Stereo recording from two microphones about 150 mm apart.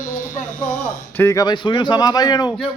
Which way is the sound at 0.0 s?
60° left (ahead or behind).